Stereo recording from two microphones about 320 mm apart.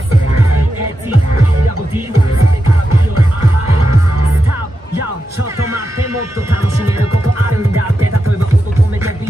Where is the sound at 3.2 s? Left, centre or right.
Right.